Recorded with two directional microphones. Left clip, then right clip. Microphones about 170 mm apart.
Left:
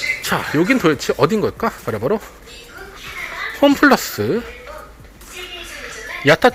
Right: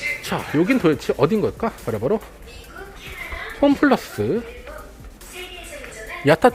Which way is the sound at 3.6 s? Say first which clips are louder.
Left 4 dB; 5° right (ahead or behind).